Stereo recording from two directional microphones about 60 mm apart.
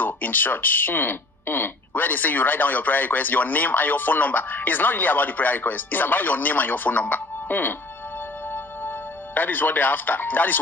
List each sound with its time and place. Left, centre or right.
0.0 s speech: left
9.3 s speech: left